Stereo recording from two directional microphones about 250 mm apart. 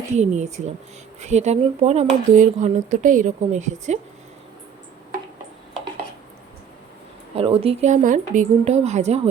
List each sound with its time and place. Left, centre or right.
0.2 s speech: right
7.3 s speech: right